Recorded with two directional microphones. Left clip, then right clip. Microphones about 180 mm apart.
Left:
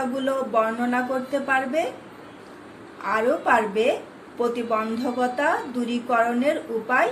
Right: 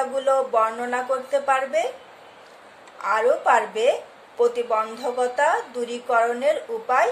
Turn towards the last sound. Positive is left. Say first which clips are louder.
# right 1 dB
turn(degrees=-60)  # may be behind; listen again after turning